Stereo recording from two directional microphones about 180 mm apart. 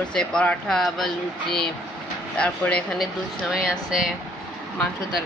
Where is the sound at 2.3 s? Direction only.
5° left (ahead or behind).